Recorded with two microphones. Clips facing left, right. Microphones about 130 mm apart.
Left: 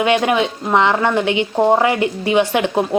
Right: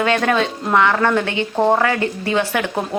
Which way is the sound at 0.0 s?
15° left (ahead or behind).